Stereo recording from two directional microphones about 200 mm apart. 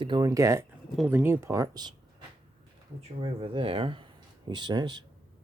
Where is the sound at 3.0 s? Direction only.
30° right (ahead or behind).